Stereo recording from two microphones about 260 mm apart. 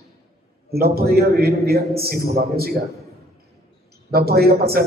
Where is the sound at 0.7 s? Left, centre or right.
Right.